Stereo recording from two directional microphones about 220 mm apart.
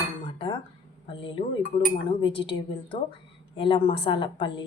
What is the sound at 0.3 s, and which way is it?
Dishes, 25° left (ahead or behind).